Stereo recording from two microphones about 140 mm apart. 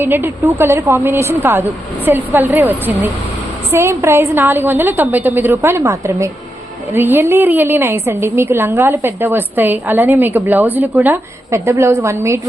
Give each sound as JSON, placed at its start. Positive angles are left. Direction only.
{"t": 0.0, "sound": "a woman's voice", "side_deg": -15}